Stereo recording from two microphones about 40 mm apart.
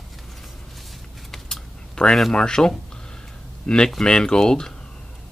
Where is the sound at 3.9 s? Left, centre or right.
Left.